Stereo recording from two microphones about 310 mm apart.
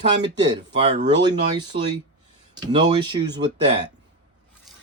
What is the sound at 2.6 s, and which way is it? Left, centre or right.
Speech, centre.